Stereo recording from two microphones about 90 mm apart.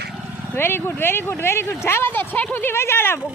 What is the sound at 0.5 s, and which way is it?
Speech, 25° left (ahead or behind).